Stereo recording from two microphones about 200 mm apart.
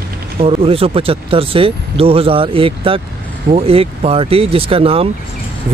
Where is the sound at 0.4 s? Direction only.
30° right (ahead or behind).